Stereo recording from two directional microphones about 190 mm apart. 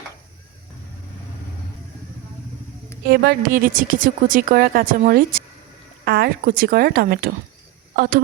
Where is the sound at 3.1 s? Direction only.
50° right (ahead or behind).